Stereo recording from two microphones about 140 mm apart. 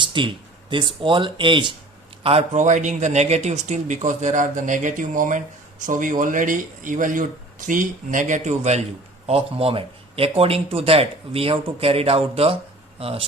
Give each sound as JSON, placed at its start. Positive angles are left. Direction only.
{"t": 0.0, "sound": "speech", "side_deg": -35}
{"t": 2.6, "sound": "speech", "side_deg": -60}
{"t": 9.2, "sound": "speech", "side_deg": -45}